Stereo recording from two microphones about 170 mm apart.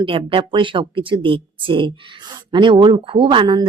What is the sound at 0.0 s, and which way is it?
Speech, 30° right (ahead or behind).